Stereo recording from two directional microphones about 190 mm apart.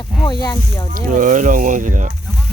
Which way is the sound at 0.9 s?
45° right (ahead or behind).